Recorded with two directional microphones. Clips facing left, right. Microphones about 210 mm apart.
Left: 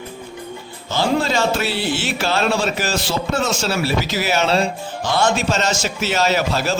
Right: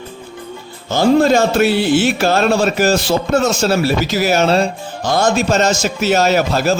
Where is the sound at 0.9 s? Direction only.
50° right (ahead or behind).